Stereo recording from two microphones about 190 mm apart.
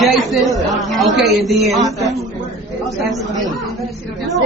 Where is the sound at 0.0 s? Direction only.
Centre (ahead or behind).